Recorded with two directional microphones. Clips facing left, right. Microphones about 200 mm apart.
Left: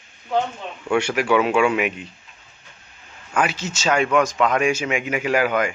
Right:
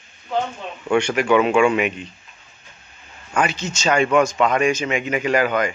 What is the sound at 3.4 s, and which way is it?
Speech, 5° left (ahead or behind).